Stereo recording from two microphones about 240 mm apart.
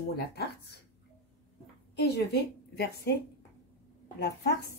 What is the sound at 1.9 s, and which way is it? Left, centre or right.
A woman's voice, left.